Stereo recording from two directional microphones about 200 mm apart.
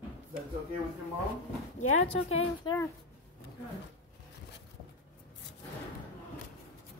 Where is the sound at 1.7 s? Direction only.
35° left (ahead or behind).